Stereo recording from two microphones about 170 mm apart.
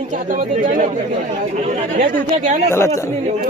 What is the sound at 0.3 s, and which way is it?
Speech, 50° right (ahead or behind).